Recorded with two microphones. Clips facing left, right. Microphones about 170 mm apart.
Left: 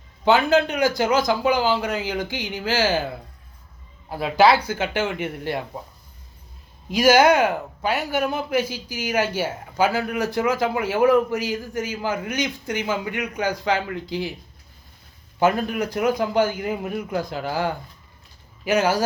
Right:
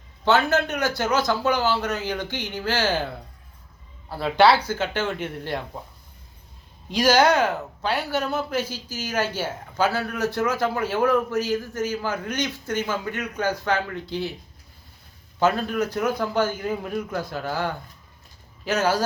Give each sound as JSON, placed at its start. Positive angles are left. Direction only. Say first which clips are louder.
{"t": 0.3, "sound": "speech", "louder": "left 3 dB", "side_deg": 15}
{"t": 4.1, "sound": "speech", "louder": "left 1 dB", "side_deg": 10}
{"t": 6.9, "sound": "speech", "louder": "left 3 dB", "side_deg": 10}
{"t": 15.4, "sound": "speech", "louder": "left 1 dB", "side_deg": 10}